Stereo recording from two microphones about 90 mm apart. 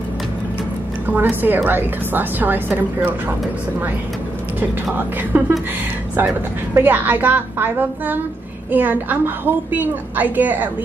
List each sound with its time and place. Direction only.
1.0 s a woman's voice: 20° right (ahead or behind)
5.3 s a woman's voice: 20° right (ahead or behind)
6.7 s a woman's voice: 20° right (ahead or behind)